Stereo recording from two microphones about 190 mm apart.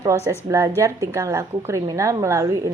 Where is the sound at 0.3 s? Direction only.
15° right (ahead or behind).